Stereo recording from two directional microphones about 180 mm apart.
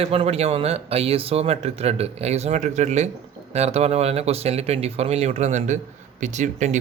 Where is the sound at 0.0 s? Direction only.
35° right (ahead or behind).